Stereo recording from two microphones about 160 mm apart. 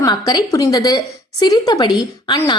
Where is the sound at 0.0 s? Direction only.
25° left (ahead or behind).